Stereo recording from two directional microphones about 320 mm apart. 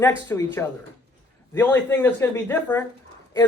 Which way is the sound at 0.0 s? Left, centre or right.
Centre.